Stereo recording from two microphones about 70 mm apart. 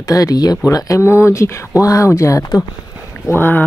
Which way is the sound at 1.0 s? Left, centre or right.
Left.